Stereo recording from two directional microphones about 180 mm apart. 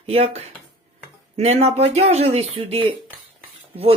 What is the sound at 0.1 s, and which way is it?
Speech, 35° right (ahead or behind).